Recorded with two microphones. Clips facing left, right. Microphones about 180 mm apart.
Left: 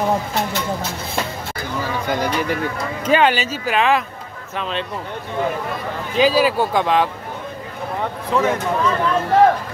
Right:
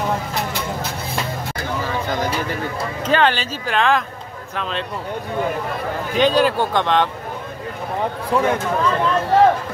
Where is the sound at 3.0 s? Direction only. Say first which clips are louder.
Left 2 dB; 10° left (ahead or behind).